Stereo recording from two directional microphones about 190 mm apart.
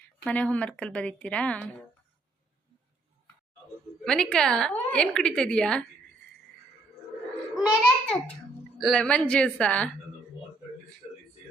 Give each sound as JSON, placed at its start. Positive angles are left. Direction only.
{"t": 0.3, "sound": "a woman's voice", "side_deg": 5}
{"t": 4.0, "sound": "a woman's voice", "side_deg": 5}
{"t": 7.5, "sound": "babbling", "side_deg": 0}
{"t": 8.8, "sound": "a woman's voice", "side_deg": 5}